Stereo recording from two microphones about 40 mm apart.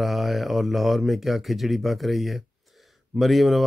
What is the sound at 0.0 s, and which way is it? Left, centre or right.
Speech, centre.